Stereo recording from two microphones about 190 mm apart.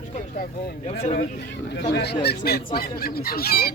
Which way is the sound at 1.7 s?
60° left (ahead or behind).